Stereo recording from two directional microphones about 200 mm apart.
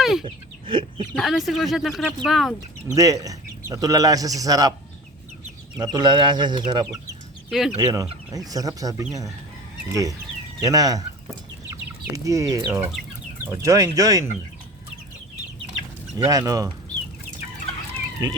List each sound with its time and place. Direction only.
0.0 s speech: centre (ahead or behind)
0.7 s speech: 25° right (ahead or behind)
1.1 s speech: centre (ahead or behind)
2.8 s speech: 15° right (ahead or behind)
5.7 s speech: 20° right (ahead or behind)
7.5 s speech: centre (ahead or behind)
8.3 s speech: 20° right (ahead or behind)
16.1 s speech: 15° right (ahead or behind)
17.9 s chicken: 20° right (ahead or behind)